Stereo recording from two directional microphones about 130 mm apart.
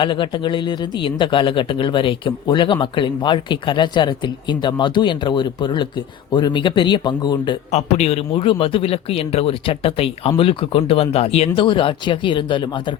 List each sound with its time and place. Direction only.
0.0 s speech: 40° left (ahead or behind)
7.7 s a man's voice: 55° left (ahead or behind); by 12.8 s 40° left (ahead or behind)